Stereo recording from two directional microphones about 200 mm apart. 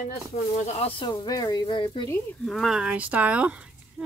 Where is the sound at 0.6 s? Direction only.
30° left (ahead or behind).